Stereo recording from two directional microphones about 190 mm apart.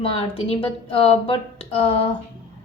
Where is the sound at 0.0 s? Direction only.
30° left (ahead or behind).